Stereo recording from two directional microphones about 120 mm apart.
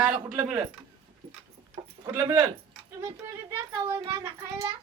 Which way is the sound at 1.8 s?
60° right (ahead or behind).